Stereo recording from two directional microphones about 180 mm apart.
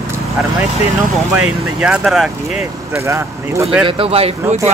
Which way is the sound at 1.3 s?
5° right (ahead or behind).